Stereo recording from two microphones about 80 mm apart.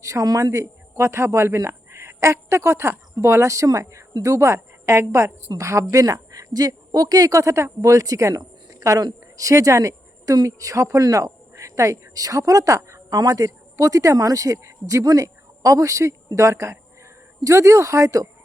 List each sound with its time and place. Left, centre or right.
0.0 s a woman's voice: right